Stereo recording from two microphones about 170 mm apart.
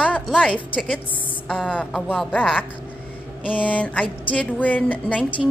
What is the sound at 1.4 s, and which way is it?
Speech, 5° left (ahead or behind).